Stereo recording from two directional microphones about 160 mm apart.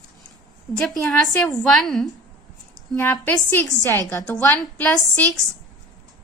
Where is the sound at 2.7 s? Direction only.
15° left (ahead or behind).